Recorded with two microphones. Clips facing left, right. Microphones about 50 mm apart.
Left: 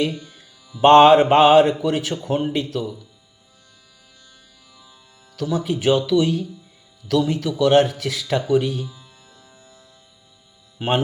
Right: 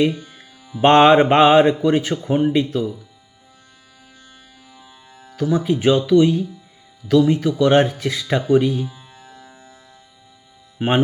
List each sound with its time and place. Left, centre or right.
0.0 s music: right
1.9 s a man's voice: right
4.8 s speech: right